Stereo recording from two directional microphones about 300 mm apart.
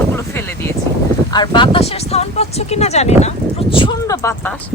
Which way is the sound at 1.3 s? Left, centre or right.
Centre.